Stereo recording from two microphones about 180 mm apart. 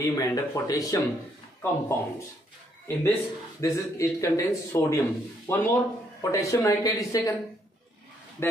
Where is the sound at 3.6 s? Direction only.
15° left (ahead or behind).